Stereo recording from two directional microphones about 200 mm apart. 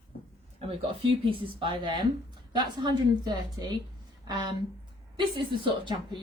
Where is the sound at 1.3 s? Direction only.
25° right (ahead or behind).